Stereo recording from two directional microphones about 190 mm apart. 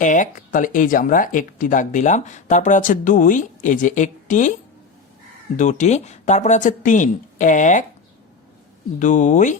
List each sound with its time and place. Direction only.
0.0 s speech: 40° left (ahead or behind)
5.5 s speech: 40° left (ahead or behind)
9.0 s speech: 40° left (ahead or behind)